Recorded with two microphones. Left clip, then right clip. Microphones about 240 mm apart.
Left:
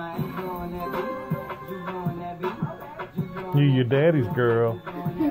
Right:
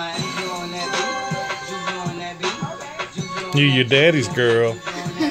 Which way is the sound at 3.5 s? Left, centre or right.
Right.